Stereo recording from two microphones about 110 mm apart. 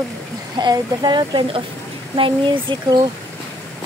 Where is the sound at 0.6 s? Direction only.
40° right (ahead or behind).